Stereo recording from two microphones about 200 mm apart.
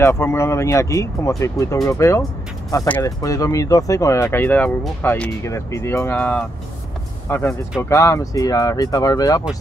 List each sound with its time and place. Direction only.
0.0 s speech: 10° left (ahead or behind)